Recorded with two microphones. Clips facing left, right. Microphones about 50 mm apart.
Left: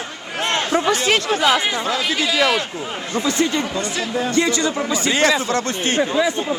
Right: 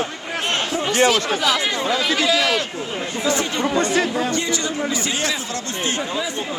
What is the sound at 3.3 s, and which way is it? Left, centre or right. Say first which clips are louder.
Speech: even; right.